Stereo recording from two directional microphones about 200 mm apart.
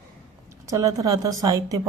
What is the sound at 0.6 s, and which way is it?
Speech, 15° right (ahead or behind).